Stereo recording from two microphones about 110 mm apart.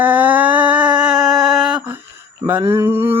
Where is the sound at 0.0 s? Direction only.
15° right (ahead or behind).